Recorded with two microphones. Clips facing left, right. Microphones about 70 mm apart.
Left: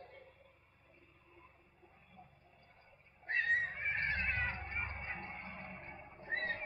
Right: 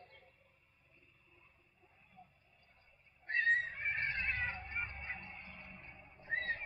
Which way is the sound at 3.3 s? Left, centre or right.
Centre.